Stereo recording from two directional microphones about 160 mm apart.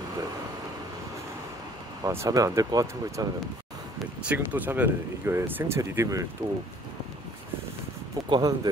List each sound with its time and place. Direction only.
2.0 s speech: 20° right (ahead or behind)
4.3 s speech: 10° right (ahead or behind)
8.3 s speech: 25° right (ahead or behind)